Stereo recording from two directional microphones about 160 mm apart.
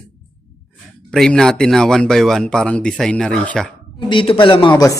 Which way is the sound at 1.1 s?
5° left (ahead or behind).